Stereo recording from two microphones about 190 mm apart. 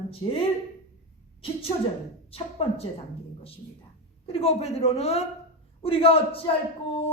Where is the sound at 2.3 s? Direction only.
30° left (ahead or behind).